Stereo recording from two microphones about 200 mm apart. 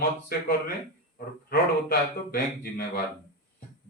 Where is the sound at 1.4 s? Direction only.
45° left (ahead or behind).